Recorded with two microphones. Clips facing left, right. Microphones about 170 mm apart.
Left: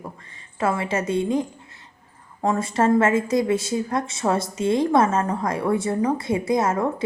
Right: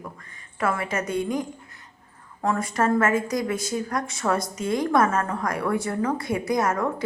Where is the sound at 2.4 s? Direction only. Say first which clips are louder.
Left 3 dB; 25° left (ahead or behind).